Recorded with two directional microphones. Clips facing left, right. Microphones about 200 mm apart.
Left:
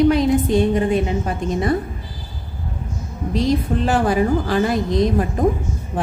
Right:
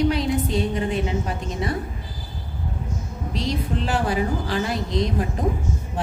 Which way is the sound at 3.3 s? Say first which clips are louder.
Left 7 dB; 50° left (ahead or behind).